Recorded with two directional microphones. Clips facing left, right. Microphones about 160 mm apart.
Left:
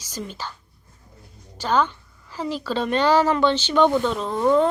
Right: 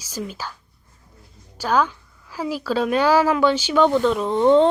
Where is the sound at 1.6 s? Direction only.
10° right (ahead or behind).